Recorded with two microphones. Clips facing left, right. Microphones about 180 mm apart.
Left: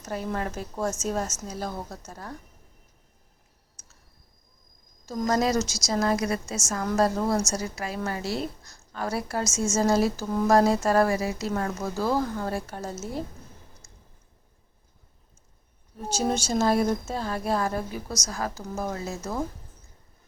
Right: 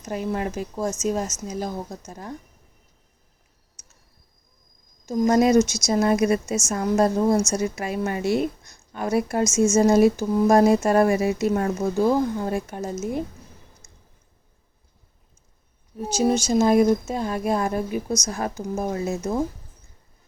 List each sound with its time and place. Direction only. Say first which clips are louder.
0.0 s speech: right 4 dB; 10° right (ahead or behind)
5.0 s speech: right 6 dB; 15° right (ahead or behind)
16.0 s speech: right 6 dB; 10° right (ahead or behind)